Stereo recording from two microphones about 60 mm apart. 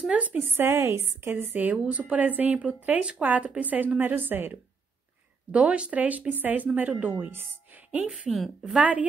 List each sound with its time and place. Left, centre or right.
0.1 s speech: right
0.4 s a woman's voice: right
5.5 s speech: right
8.3 s a woman's voice: centre
8.7 s speech: right